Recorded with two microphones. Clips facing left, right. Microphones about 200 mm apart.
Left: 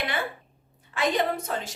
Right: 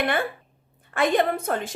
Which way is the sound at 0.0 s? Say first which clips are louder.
Right 6 dB; 55° right (ahead or behind).